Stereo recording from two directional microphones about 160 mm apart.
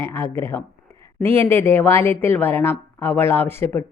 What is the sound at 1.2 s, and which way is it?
A woman's voice, 15° left (ahead or behind).